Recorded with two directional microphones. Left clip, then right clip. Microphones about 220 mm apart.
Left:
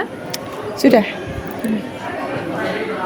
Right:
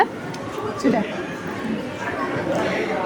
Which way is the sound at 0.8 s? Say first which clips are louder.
Left 9 dB; 45° left (ahead or behind).